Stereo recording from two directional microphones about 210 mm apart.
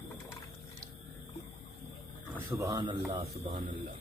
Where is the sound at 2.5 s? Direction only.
20° right (ahead or behind).